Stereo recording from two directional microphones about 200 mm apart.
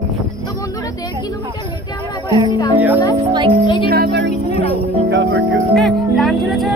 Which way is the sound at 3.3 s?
25° right (ahead or behind).